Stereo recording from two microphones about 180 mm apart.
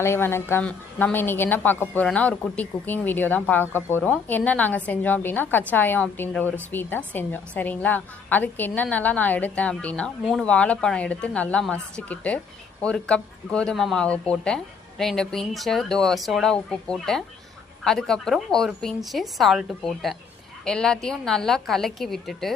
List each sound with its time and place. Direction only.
0.0 s a woman's voice: 15° left (ahead or behind)